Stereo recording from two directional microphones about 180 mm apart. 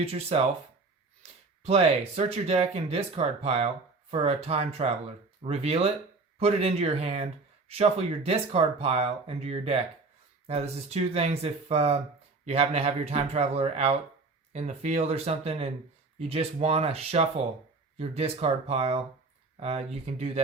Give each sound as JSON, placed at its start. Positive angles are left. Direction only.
{"t": 0.0, "sound": "speech", "side_deg": -35}
{"t": 1.6, "sound": "speech", "side_deg": -35}